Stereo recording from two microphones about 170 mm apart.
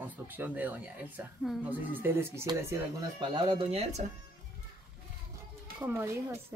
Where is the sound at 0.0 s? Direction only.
10° right (ahead or behind).